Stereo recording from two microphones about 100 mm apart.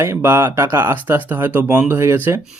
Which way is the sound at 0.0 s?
25° right (ahead or behind).